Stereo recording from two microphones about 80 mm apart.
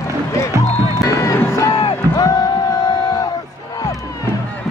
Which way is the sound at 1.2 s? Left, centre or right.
Left.